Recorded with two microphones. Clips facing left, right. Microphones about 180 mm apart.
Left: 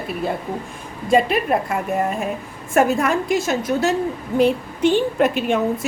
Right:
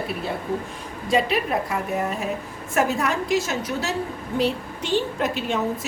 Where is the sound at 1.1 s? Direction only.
50° left (ahead or behind).